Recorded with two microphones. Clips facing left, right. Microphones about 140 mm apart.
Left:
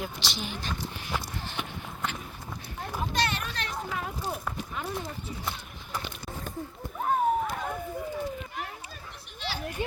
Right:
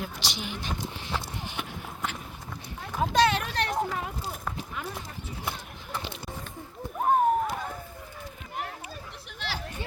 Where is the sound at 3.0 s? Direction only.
90° right; by 3.8 s 65° right (ahead or behind).